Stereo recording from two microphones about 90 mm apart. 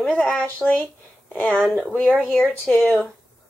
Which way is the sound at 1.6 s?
10° right (ahead or behind).